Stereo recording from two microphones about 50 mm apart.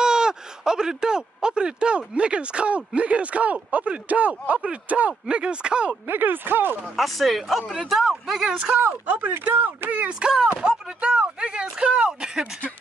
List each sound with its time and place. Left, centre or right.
0.0 s speech: centre; by 5.1 s right
5.3 s speech: centre
6.0 s speech: right
7.0 s speech: centre
8.5 s speech: right
8.8 s speech: right; by 12.4 s centre